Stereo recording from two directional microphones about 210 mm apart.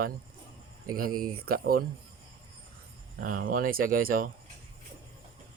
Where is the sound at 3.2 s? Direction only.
40° right (ahead or behind).